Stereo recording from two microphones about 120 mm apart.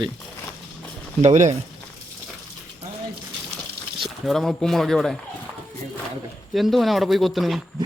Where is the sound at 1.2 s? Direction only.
80° right.